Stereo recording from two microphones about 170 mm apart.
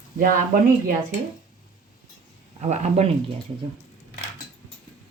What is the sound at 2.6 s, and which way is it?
Speech, 40° right (ahead or behind).